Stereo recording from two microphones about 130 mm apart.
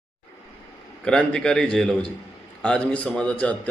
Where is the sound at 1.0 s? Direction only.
5° left (ahead or behind).